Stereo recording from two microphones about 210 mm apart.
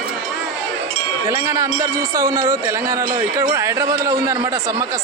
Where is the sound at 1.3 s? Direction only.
15° right (ahead or behind).